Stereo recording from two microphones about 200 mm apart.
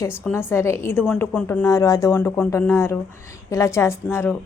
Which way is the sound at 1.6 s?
15° left (ahead or behind).